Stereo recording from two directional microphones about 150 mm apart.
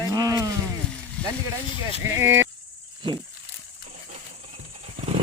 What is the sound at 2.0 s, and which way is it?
Speech, 15° right (ahead or behind).